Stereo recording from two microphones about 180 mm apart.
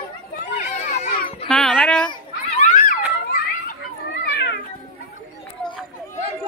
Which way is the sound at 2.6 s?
45° left (ahead or behind).